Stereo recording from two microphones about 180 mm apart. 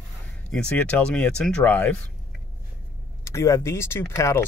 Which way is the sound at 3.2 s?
15° left (ahead or behind).